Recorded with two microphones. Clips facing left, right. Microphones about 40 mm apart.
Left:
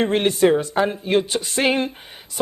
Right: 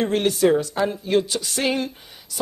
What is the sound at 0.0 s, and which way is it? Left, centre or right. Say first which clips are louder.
Speech: left 2 dB; left.